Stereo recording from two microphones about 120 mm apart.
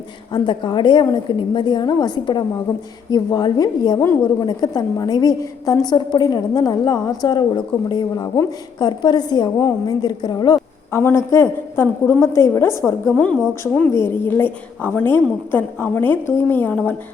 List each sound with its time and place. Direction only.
0.3 s a woman's voice: 40° left (ahead or behind)
10.9 s a woman's voice: 20° left (ahead or behind)